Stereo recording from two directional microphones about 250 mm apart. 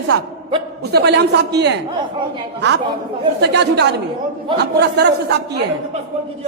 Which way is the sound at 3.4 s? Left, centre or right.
Right.